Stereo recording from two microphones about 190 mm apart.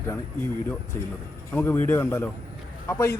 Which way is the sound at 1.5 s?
10° left (ahead or behind).